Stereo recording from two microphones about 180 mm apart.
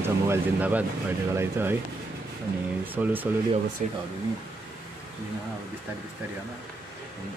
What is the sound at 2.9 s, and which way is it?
Speech, 10° right (ahead or behind).